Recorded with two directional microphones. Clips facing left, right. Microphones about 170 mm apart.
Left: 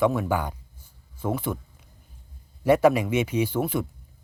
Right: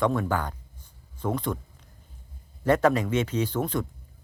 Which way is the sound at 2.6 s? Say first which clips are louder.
Left 3 dB; 10° left (ahead or behind).